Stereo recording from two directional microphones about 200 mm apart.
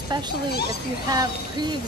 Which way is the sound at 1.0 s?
20° right (ahead or behind).